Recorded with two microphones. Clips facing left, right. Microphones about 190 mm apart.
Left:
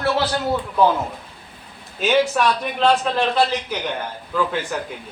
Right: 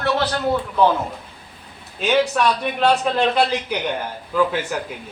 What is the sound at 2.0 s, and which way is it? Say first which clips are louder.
Speech: even; centre (ahead or behind).